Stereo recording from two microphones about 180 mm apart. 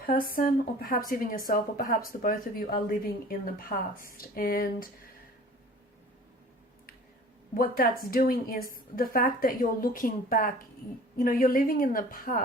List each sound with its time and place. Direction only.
0.0 s a woman's voice: 50° left (ahead or behind)
7.5 s a woman's voice: 55° left (ahead or behind)